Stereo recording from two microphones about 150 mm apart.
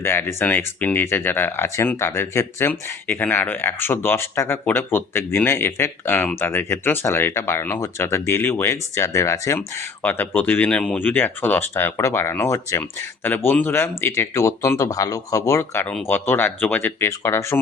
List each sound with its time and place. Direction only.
0.0 s speech: 15° left (ahead or behind)